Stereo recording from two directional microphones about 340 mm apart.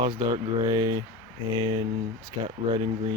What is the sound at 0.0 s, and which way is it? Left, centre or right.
Speech, centre.